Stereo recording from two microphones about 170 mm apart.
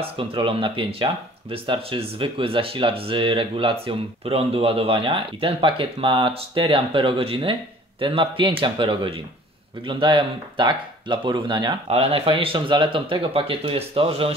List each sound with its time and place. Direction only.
0.0 s speech: 30° right (ahead or behind)